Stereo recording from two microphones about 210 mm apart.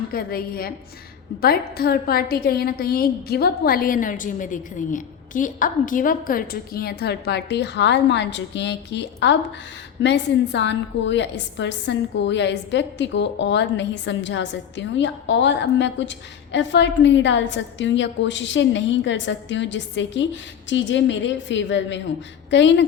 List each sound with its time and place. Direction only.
0.1 s a woman's voice: 45° left (ahead or behind)